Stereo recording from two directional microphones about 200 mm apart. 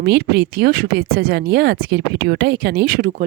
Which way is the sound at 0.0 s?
55° right (ahead or behind).